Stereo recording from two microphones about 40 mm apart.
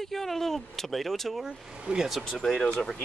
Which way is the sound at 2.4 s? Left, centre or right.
Centre.